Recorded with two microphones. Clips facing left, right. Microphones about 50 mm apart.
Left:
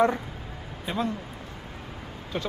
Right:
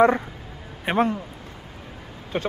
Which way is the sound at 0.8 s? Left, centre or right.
Right.